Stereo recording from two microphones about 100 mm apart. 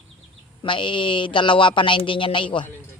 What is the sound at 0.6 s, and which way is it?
A man's voice, 55° left (ahead or behind).